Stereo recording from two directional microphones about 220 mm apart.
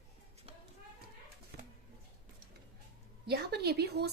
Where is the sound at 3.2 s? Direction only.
45° right (ahead or behind).